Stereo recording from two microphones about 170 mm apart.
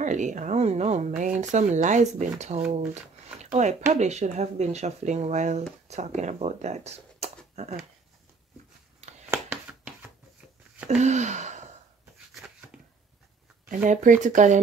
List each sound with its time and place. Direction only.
0.0 s speech: 45° right (ahead or behind)
9.3 s a sound: 5° right (ahead or behind)
11.0 s speech: 40° right (ahead or behind)
13.8 s speech: 50° right (ahead or behind)